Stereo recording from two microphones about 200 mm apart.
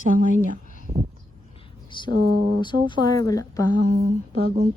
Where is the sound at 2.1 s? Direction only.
50° right (ahead or behind).